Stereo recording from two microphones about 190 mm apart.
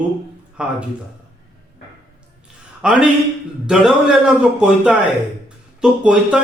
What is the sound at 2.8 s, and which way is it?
A man's voice, 5° right (ahead or behind).